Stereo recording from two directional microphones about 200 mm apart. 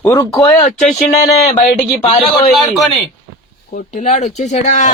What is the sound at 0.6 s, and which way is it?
Speech, 40° left (ahead or behind).